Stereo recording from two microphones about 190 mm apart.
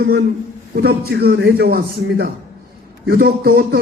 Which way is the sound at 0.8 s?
55° right (ahead or behind).